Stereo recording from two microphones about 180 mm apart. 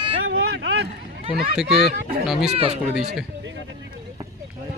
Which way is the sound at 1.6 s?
Centre (ahead or behind).